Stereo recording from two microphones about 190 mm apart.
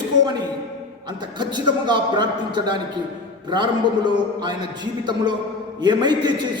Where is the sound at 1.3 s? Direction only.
25° right (ahead or behind).